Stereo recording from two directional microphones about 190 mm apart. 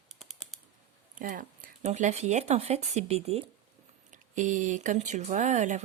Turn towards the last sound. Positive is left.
turn(degrees=-40)  # may be behind; listen again after turning